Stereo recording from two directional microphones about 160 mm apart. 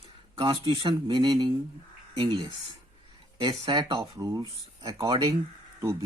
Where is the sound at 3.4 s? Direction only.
30° right (ahead or behind).